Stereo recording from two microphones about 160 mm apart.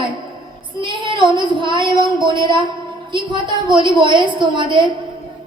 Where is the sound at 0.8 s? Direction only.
30° right (ahead or behind).